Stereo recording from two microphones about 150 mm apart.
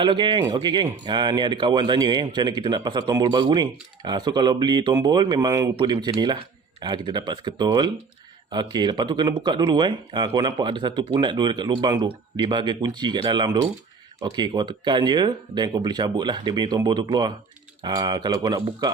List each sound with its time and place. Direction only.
0.0 s speech: 30° right (ahead or behind)